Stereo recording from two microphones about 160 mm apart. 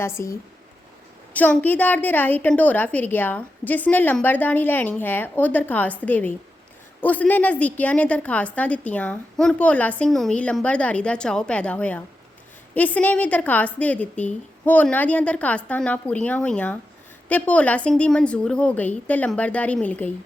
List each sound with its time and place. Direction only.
0.0 s a woman's voice: 15° left (ahead or behind)